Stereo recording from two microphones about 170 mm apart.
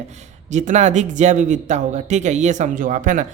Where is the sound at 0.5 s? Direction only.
45° right (ahead or behind).